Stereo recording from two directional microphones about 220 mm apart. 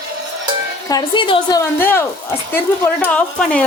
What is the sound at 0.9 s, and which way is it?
A woman's voice, 20° left (ahead or behind).